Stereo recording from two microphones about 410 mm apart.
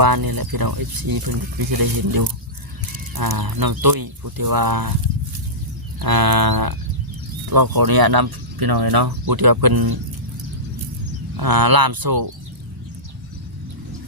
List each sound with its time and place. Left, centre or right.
0.0 s speech: right
6.0 s speech: right
11.3 s speech: right